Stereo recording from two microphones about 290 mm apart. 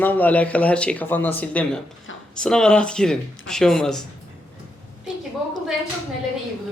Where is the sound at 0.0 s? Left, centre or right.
Centre.